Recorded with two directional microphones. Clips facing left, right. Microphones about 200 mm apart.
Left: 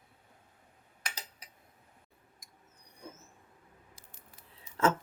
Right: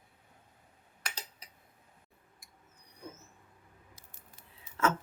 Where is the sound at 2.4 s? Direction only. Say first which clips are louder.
Even; 40° left (ahead or behind).